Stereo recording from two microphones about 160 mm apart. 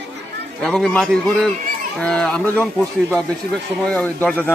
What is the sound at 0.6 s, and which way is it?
Speech, 5° left (ahead or behind).